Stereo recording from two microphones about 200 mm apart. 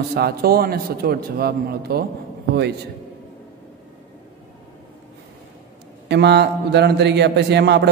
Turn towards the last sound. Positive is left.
turn(degrees=-60)  # may be behind; listen again after turning